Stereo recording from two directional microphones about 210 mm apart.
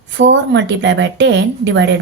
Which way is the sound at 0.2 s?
60° right (ahead or behind).